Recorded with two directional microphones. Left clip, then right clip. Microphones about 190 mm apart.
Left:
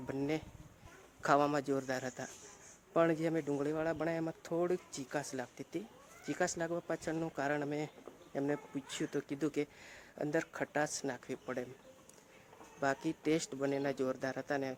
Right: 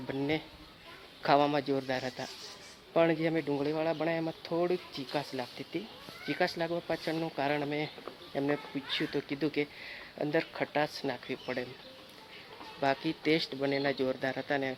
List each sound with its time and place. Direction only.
0.1 s speech: 15° left (ahead or behind)
12.8 s speech: 15° left (ahead or behind)